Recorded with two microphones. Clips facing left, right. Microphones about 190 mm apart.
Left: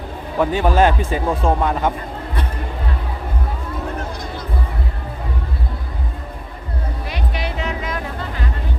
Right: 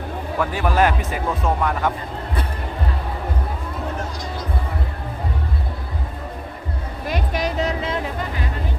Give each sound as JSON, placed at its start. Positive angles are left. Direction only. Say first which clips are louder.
{"t": 0.3, "sound": "speech", "louder": "left 4 dB", "side_deg": 25}
{"t": 7.1, "sound": "music", "louder": "right 5 dB", "side_deg": -40}